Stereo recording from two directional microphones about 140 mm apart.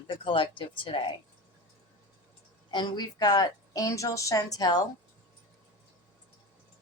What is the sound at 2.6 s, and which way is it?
A woman's voice, 30° left (ahead or behind).